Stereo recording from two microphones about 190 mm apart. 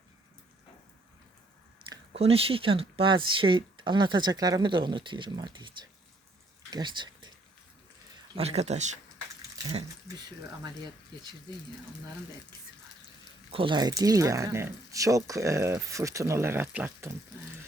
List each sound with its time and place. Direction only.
1.8 s a sound: 25° right (ahead or behind)
2.1 s speech: 30° right (ahead or behind)
8.4 s speech: 35° right (ahead or behind)
13.5 s speech: 25° right (ahead or behind); by 17.2 s 10° right (ahead or behind)